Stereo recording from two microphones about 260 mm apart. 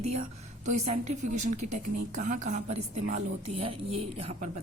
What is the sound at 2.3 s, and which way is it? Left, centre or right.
Speech, right.